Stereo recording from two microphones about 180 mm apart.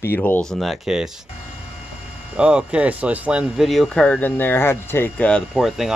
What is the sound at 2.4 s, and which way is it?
Speech, 5° right (ahead or behind).